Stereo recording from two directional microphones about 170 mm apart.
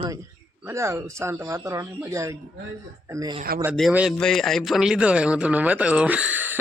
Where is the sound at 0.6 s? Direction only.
15° right (ahead or behind).